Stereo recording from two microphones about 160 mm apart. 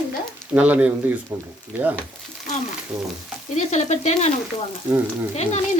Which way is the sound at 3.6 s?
45° left (ahead or behind).